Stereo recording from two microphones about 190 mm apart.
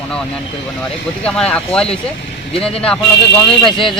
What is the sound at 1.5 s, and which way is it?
Speech, 5° left (ahead or behind).